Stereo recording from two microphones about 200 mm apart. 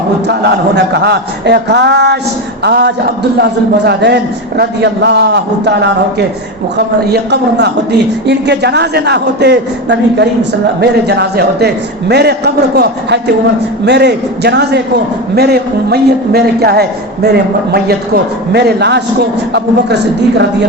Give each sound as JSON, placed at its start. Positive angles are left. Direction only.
{"t": 0.3, "sound": "a man's voice", "side_deg": -55}